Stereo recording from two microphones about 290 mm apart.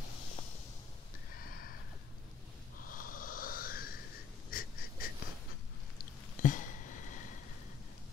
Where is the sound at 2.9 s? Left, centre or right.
Left.